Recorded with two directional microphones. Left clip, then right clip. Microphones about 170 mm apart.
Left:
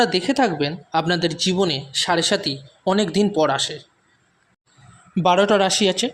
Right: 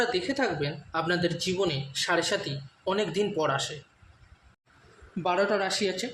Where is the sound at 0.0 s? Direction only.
55° left (ahead or behind).